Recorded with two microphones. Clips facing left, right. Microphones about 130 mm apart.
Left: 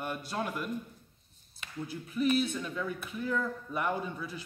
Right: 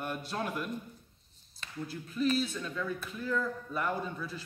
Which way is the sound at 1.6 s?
15° left (ahead or behind).